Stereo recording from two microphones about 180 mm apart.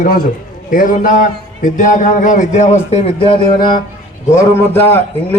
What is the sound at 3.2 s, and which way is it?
Speech, 30° left (ahead or behind).